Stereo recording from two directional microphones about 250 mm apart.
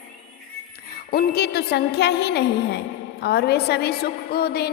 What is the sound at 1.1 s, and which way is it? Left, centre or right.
A woman's voice, left.